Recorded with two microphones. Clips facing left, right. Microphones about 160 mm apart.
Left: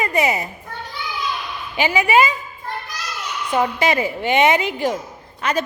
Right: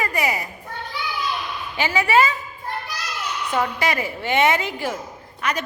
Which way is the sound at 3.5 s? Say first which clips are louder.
Left 4 dB; 20° left (ahead or behind).